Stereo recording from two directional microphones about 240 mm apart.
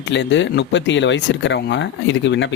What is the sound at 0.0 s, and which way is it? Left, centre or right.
Speech, left.